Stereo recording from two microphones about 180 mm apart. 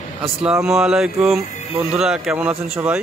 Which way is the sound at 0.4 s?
5° right (ahead or behind).